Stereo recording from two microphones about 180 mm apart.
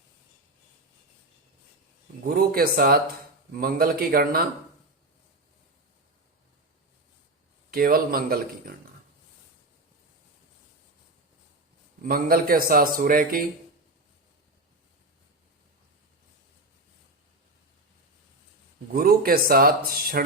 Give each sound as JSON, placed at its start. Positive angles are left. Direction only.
{"t": 2.2, "sound": "a man's voice", "side_deg": -55}
{"t": 7.7, "sound": "speech", "side_deg": -55}
{"t": 12.0, "sound": "a man's voice", "side_deg": -55}
{"t": 18.9, "sound": "speech", "side_deg": -55}